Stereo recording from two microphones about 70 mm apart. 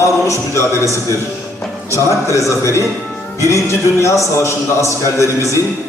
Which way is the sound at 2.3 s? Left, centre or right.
Left.